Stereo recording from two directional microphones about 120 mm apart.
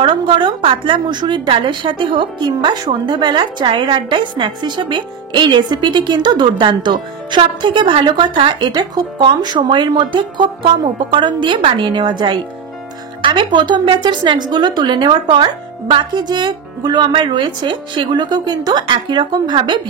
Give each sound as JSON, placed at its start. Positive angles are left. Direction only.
{"t": 0.0, "sound": "a woman's voice", "side_deg": -45}